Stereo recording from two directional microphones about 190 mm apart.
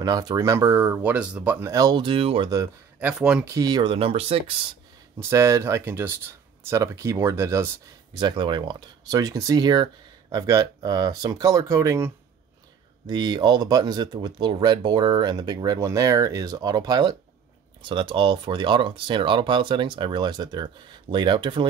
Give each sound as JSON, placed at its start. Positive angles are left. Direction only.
{"t": 0.0, "sound": "speech", "side_deg": -20}
{"t": 3.1, "sound": "speech", "side_deg": -5}
{"t": 3.5, "sound": "speech", "side_deg": -20}
{"t": 5.3, "sound": "speech", "side_deg": -15}